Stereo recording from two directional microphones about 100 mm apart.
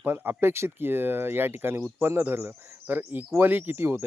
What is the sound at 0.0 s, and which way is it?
Speech, 20° right (ahead or behind).